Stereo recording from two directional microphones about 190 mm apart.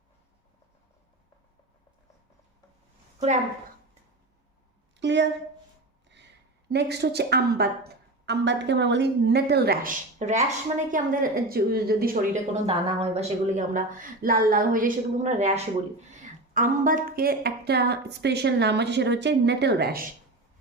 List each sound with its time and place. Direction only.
4.9 s a sound: 65° right (ahead or behind)
6.7 s a woman's voice: 60° right (ahead or behind)
10.2 s a woman's voice: 40° right (ahead or behind)
12.6 s a woman's voice: 30° right (ahead or behind); by 20.1 s 55° right (ahead or behind)